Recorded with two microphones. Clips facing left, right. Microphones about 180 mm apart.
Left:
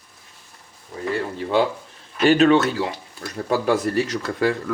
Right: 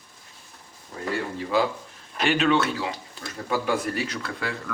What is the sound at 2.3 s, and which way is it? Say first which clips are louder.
Speech: left 7 dB; 40° left (ahead or behind).